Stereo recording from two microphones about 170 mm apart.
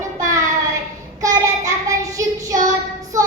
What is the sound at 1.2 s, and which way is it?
Child singing, 20° right (ahead or behind).